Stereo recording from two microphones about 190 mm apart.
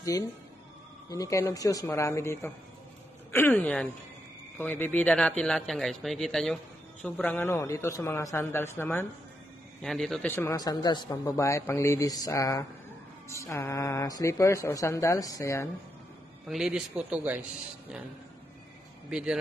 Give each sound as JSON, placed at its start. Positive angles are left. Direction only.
{"t": 1.1, "sound": "a man's voice", "side_deg": 15}
{"t": 16.4, "sound": "speech", "side_deg": -5}
{"t": 19.0, "sound": "speech", "side_deg": -5}